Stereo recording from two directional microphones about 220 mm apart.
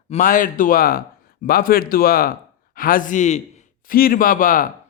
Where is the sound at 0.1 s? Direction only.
35° left (ahead or behind).